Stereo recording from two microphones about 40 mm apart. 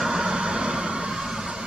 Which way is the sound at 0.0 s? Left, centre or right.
Centre.